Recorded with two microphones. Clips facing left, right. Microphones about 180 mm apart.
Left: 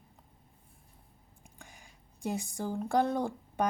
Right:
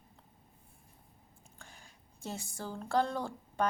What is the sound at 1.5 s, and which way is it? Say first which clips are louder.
Speech: left 2 dB; 15° left (ahead or behind).